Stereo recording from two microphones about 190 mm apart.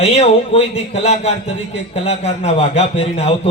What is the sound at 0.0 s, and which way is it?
A man's voice, 35° left (ahead or behind).